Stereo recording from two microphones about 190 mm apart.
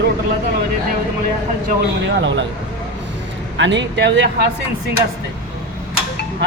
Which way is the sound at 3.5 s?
70° right (ahead or behind).